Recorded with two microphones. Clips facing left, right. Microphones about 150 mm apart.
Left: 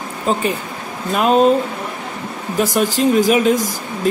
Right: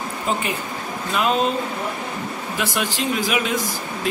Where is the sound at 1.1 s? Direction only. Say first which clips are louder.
Left 7 dB; 45° left (ahead or behind).